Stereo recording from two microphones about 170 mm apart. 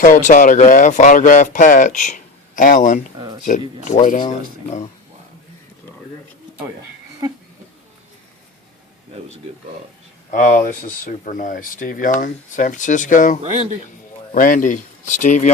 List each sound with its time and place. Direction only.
0.0 s speech: 50° left (ahead or behind)
3.2 s speech: 25° right (ahead or behind)
3.8 s speech: 50° left (ahead or behind)
10.3 s speech: 45° left (ahead or behind)
13.4 s a man's voice: 40° right (ahead or behind)
14.3 s speech: 50° left (ahead or behind)